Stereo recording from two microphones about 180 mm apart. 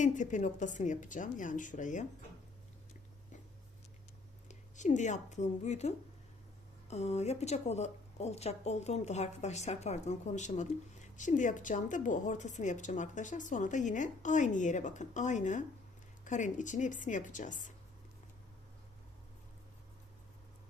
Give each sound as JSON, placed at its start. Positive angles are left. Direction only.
{"t": 0.0, "sound": "speech", "side_deg": 40}
{"t": 4.4, "sound": "speech", "side_deg": 40}
{"t": 6.9, "sound": "speech", "side_deg": 35}